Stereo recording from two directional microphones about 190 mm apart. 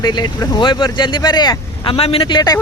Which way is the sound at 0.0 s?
20° left (ahead or behind).